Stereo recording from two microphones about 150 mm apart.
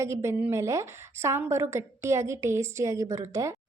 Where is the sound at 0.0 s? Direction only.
20° right (ahead or behind).